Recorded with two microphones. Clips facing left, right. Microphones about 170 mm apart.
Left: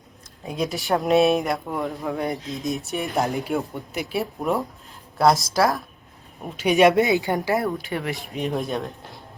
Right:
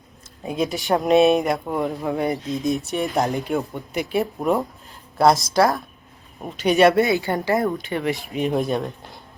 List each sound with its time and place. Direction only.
0.4 s speech: centre (ahead or behind); by 7.5 s 15° left (ahead or behind)
7.5 s speech: centre (ahead or behind)